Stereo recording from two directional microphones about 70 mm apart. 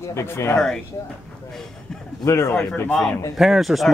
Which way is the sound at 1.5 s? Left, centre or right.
Centre.